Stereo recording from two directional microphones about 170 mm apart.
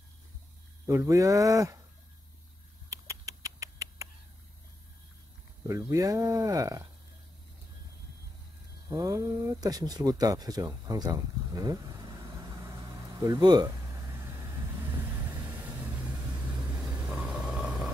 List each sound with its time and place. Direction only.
0.8 s speech: 20° right (ahead or behind)
2.9 s rodents: 20° right (ahead or behind)
5.7 s speech: 20° right (ahead or behind)
8.8 s speech: 20° right (ahead or behind)
17.0 s a sound: 5° right (ahead or behind)